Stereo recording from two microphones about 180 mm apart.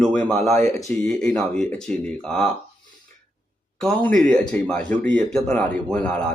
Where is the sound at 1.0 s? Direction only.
5° left (ahead or behind).